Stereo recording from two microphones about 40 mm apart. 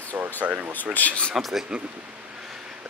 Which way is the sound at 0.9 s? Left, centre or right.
Left.